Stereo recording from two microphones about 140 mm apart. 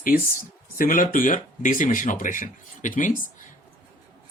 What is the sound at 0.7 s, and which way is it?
Speech, 75° left (ahead or behind).